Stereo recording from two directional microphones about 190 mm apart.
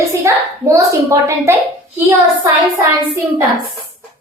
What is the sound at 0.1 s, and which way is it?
A child's voice, 15° right (ahead or behind).